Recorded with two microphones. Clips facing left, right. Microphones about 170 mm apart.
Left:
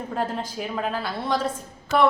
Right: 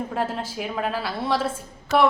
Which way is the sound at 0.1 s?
5° right (ahead or behind).